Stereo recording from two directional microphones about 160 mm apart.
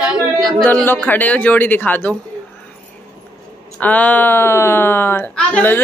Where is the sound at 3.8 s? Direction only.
10° left (ahead or behind).